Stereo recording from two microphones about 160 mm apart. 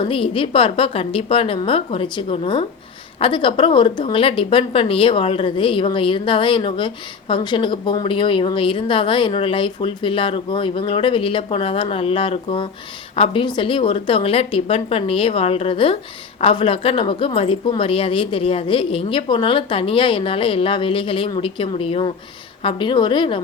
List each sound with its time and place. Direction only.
0.0 s a woman's voice: 35° left (ahead or behind)